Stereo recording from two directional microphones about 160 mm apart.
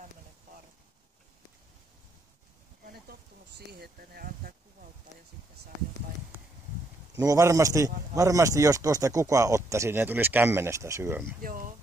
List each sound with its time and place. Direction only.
2.8 s a sound: 75° right (ahead or behind)
7.2 s a man's voice: 20° right (ahead or behind)
11.4 s speech: 60° right (ahead or behind)